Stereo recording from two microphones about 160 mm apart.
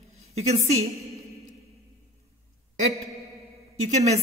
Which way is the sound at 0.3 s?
40° right (ahead or behind).